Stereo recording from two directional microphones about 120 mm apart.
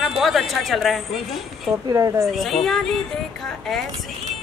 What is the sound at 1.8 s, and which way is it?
Speech, 25° right (ahead or behind).